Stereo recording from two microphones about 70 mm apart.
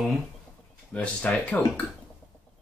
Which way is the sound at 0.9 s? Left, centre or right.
Centre.